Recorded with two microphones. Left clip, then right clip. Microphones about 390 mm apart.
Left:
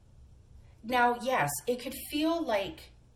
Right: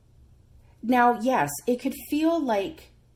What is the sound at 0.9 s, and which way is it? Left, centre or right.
Speech, centre.